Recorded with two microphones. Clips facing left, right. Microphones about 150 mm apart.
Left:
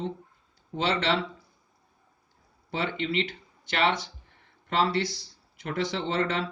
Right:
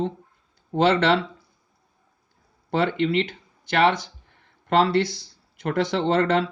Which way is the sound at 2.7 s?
55° right (ahead or behind).